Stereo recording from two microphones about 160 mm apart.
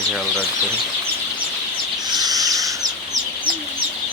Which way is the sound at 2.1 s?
25° right (ahead or behind).